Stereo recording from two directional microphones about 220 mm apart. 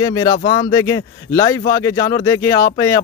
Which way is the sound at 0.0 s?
15° left (ahead or behind).